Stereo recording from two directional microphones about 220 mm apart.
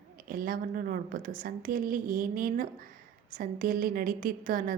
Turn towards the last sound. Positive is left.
turn(degrees=-40)  # may be behind; listen again after turning